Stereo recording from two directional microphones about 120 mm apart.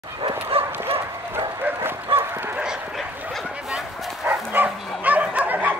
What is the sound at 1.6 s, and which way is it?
Bow-wow, 15° right (ahead or behind).